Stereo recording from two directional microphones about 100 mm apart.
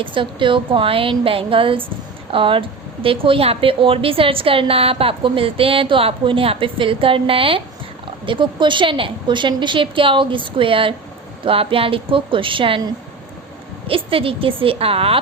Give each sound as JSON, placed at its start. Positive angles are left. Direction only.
{"t": 0.0, "sound": "a woman's voice", "side_deg": -55}